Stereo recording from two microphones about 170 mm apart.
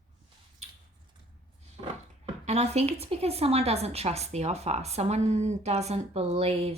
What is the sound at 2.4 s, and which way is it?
Speech, 40° right (ahead or behind).